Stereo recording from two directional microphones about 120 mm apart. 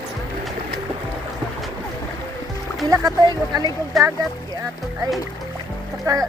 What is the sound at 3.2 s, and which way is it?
Speech, 35° right (ahead or behind).